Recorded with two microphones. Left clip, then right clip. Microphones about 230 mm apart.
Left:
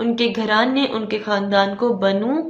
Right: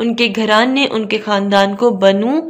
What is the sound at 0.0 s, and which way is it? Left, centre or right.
A woman's voice, right.